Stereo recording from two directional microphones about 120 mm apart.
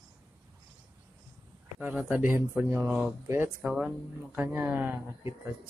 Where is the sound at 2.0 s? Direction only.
15° right (ahead or behind).